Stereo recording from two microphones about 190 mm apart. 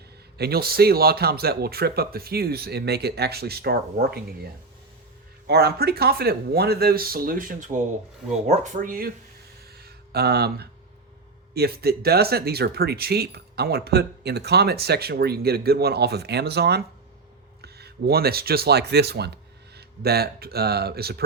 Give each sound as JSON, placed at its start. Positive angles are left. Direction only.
{"t": 0.3, "sound": "speech", "side_deg": -55}
{"t": 5.5, "sound": "speech", "side_deg": -55}
{"t": 9.7, "sound": "a sound", "side_deg": -55}
{"t": 11.5, "sound": "speech", "side_deg": -55}